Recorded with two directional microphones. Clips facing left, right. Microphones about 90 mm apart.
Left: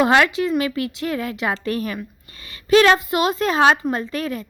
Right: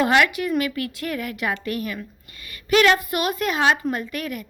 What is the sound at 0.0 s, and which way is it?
A woman's voice, 30° left (ahead or behind).